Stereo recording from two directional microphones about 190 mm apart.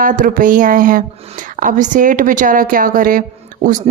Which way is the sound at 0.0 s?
45° right (ahead or behind).